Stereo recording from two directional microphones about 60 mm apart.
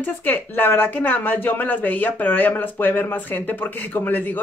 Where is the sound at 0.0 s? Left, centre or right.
Left.